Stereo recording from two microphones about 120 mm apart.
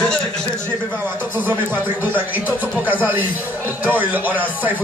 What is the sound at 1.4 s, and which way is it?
Speech, 20° right (ahead or behind).